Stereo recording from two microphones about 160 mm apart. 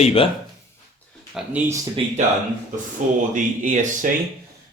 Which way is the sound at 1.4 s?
5° right (ahead or behind).